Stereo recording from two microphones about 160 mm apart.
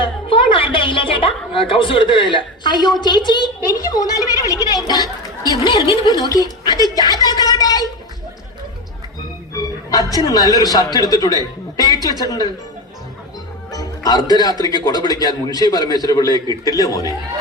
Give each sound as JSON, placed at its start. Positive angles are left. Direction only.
{"t": 0.0, "sound": "a sound", "side_deg": 35}
{"t": 4.7, "sound": "chatter", "side_deg": 25}
{"t": 5.9, "sound": "a woman's voice", "side_deg": 25}
{"t": 6.9, "sound": "a sound", "side_deg": 25}
{"t": 10.2, "sound": "speech", "side_deg": 25}
{"t": 13.7, "sound": "music", "side_deg": 25}
{"t": 14.8, "sound": "speech", "side_deg": 25}